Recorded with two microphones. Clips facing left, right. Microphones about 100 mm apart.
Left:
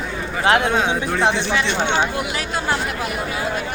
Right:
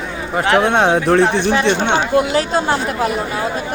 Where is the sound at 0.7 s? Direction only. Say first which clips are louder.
Right 7 dB; 65° right (ahead or behind).